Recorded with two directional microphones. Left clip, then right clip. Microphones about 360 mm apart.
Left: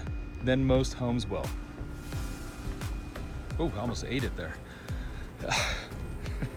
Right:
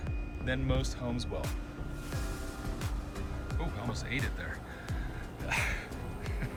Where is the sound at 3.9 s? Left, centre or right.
Centre.